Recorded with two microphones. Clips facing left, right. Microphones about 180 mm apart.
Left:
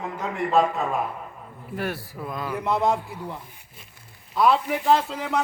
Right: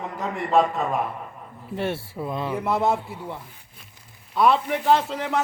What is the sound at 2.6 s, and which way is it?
A man's voice, 5° right (ahead or behind).